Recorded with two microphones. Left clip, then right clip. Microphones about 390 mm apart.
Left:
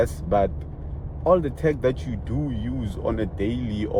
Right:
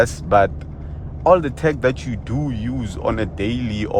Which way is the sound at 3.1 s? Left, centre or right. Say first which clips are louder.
Right 5 dB; right.